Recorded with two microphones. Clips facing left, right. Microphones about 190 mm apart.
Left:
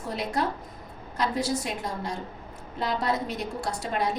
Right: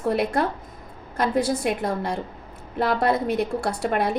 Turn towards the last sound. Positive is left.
turn(degrees=-60)  # may be behind; listen again after turning